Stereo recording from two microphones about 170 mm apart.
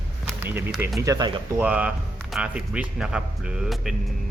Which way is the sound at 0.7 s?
Centre (ahead or behind).